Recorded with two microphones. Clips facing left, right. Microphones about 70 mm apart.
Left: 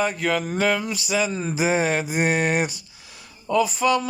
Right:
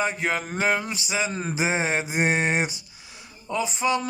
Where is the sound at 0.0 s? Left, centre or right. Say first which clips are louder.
Left 3 dB; right.